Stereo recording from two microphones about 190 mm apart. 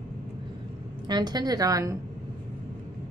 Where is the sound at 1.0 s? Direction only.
20° right (ahead or behind).